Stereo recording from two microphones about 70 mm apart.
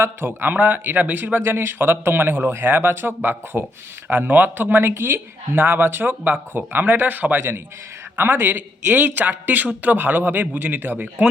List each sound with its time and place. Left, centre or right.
0.0 s speech: right